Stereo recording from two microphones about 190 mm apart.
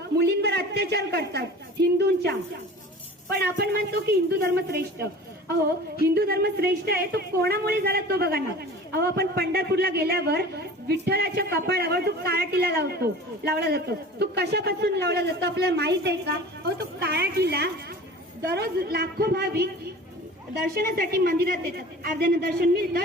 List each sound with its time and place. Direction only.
0.2 s a woman's voice: 60° right (ahead or behind)
3.3 s a man's voice: 55° right (ahead or behind)
6.1 s a man's voice: 55° right (ahead or behind)
20.7 s a woman's voice: 50° right (ahead or behind)